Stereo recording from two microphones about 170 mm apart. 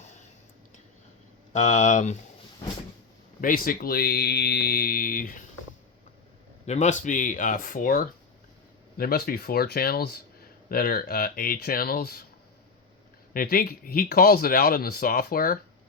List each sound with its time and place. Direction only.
0.0 s a sound: 45° left (ahead or behind)
1.5 s speech: 45° left (ahead or behind)
3.4 s speech: 55° left (ahead or behind)
6.7 s speech: 45° left (ahead or behind); by 12.2 s 60° left (ahead or behind)
13.3 s speech: 60° left (ahead or behind)